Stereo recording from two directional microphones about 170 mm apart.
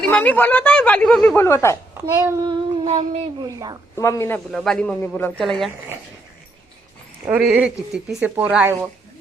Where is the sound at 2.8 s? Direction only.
40° right (ahead or behind).